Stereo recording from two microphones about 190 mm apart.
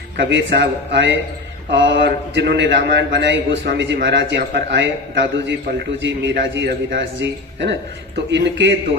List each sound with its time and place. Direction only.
0.2 s a man's voice: 65° right (ahead or behind)